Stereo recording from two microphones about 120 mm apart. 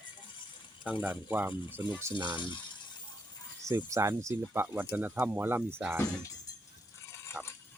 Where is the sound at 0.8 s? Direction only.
10° right (ahead or behind).